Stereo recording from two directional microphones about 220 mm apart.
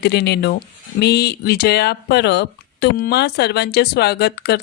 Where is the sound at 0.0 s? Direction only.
50° left (ahead or behind).